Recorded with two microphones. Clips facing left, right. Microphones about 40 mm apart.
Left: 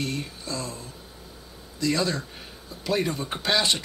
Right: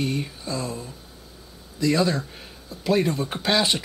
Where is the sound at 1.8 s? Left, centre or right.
Centre.